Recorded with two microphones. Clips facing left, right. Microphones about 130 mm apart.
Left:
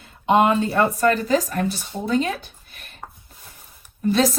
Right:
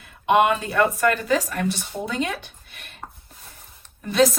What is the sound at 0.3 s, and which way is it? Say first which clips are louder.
A woman's voice: left 1 dB; 30° left (ahead or behind).